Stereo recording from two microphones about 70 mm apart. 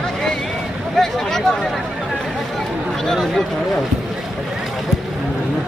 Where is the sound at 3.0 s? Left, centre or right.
Centre.